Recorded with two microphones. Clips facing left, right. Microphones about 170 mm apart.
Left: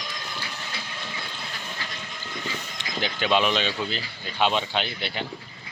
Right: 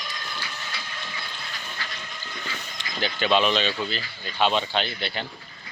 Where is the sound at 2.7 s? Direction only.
15° left (ahead or behind).